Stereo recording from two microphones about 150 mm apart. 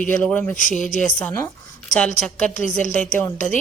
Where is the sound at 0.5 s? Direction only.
60° left (ahead or behind).